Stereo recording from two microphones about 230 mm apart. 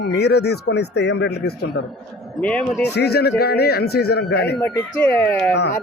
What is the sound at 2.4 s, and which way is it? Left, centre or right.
Speech, centre.